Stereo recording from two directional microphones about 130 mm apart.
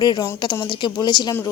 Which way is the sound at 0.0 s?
35° left (ahead or behind).